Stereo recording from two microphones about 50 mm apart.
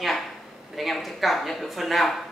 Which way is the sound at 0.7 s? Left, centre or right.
Centre.